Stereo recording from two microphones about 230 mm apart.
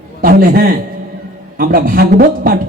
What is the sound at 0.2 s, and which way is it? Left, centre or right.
Speech, right.